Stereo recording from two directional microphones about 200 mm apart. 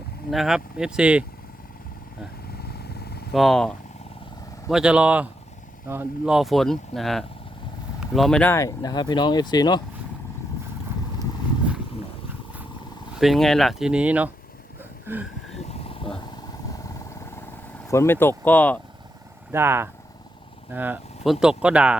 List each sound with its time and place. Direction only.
0.3 s speech: centre (ahead or behind)
2.6 s vehicle: 50° left (ahead or behind)
3.3 s speech: centre (ahead or behind)
4.7 s speech: 5° right (ahead or behind); by 9.8 s 20° left (ahead or behind)
13.1 s speech: centre (ahead or behind)
15.0 s a sound: 10° right (ahead or behind)
15.7 s vehicle: 30° left (ahead or behind)
16.7 s vehicle: 15° left (ahead or behind)
17.8 s speech: 15° left (ahead or behind)
19.5 s speech: 10° right (ahead or behind)